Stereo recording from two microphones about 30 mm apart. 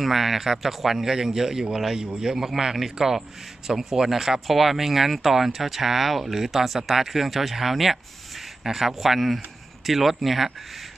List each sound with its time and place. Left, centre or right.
0.0 s speech: centre
1.0 s speech: centre